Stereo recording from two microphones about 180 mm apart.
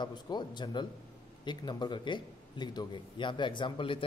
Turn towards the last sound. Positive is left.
turn(degrees=25)  # may be behind; listen again after turning